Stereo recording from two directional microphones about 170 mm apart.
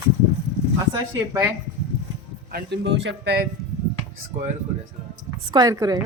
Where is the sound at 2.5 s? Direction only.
90° right.